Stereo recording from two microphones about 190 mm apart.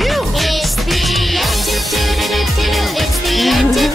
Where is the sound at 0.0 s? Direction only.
Centre (ahead or behind).